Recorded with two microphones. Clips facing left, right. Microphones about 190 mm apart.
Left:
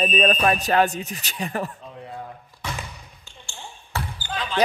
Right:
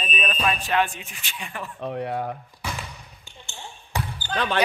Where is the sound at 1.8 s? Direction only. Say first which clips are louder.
Right 9 dB; 75° right (ahead or behind).